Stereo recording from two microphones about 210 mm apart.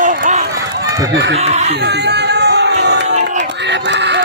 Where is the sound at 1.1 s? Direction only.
50° right (ahead or behind).